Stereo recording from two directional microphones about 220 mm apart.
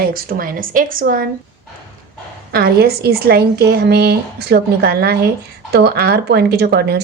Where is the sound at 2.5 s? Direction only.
45° right (ahead or behind).